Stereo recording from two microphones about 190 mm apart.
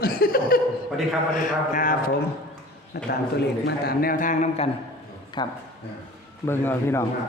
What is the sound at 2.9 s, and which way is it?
A man's voice, 60° left (ahead or behind).